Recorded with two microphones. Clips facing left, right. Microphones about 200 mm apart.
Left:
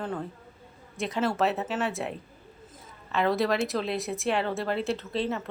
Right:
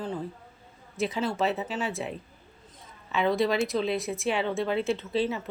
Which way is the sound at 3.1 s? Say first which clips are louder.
Even; centre (ahead or behind).